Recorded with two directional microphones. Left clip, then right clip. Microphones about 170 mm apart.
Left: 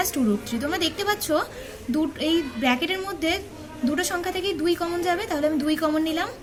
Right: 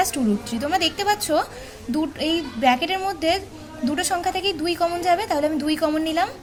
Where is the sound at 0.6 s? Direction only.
30° right (ahead or behind).